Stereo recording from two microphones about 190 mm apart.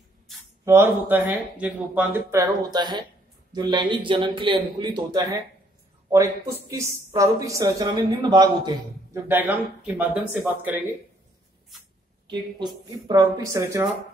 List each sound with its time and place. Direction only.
0.7 s a woman's voice: 10° right (ahead or behind)
9.3 s a woman's voice: 10° right (ahead or behind)
12.3 s speech: 25° right (ahead or behind)